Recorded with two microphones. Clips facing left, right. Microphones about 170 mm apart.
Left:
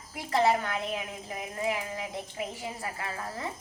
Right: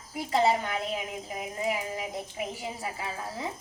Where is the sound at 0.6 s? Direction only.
15° right (ahead or behind).